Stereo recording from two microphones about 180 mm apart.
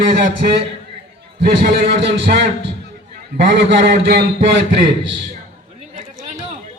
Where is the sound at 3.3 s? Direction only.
75° right (ahead or behind).